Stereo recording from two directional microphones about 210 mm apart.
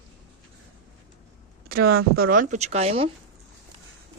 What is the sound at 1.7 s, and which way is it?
Speech, 45° right (ahead or behind).